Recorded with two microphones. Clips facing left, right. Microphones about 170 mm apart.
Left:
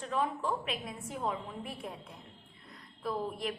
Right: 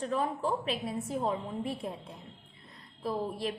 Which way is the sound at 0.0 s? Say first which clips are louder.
Right 2 dB; 40° right (ahead or behind).